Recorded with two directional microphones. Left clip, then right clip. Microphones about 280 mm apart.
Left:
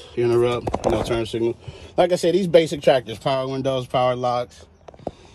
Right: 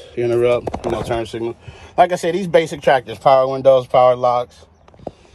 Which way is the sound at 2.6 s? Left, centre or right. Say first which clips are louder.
Right 3 dB; centre.